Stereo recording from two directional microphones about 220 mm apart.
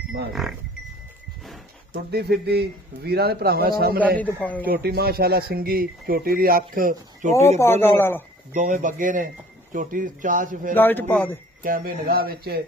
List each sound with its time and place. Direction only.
0.3 s livestock: centre (ahead or behind)
2.0 s speech: 50° right (ahead or behind)
4.2 s speech: 5° left (ahead or behind)
4.8 s speech: 45° right (ahead or behind)
7.5 s speech: 10° left (ahead or behind)
8.5 s speech: 35° right (ahead or behind)
10.8 s speech: 10° left (ahead or behind)
11.6 s speech: 40° right (ahead or behind)